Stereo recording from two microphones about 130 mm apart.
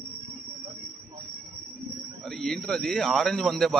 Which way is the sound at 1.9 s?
Centre (ahead or behind).